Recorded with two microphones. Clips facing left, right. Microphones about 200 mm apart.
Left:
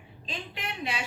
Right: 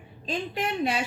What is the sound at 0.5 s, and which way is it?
Speech, 45° right (ahead or behind).